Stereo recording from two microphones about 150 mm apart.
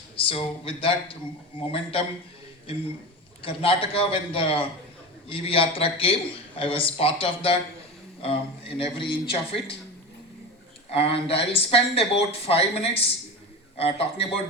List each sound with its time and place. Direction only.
0.2 s speech: 35° left (ahead or behind)
3.4 s speech: 35° left (ahead or behind)
10.9 s speech: 40° left (ahead or behind)